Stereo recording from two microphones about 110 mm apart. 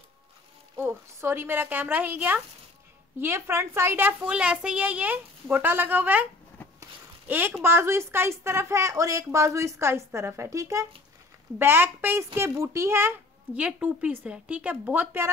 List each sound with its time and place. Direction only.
0.7 s a woman's voice: 20° right (ahead or behind)
4.2 s a woman's voice: 10° right (ahead or behind)
7.2 s speech: 20° right (ahead or behind)
13.6 s a woman's voice: 15° right (ahead or behind)